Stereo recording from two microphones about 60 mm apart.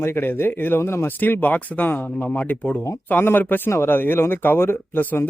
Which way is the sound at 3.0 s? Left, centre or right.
Left.